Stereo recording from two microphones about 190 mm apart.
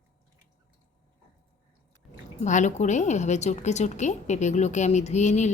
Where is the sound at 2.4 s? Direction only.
40° left (ahead or behind).